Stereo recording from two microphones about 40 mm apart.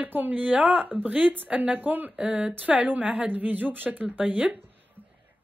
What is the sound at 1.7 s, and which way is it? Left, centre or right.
Speech, right.